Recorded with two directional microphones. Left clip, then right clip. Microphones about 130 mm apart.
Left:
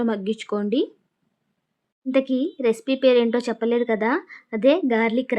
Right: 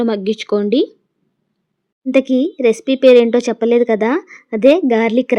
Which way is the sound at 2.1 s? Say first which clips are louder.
Right 8 dB; 30° right (ahead or behind).